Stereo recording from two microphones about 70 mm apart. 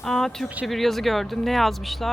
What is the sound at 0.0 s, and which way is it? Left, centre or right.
Speech, centre.